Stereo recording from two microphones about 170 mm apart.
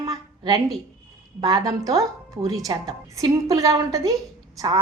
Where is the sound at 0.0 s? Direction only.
20° right (ahead or behind).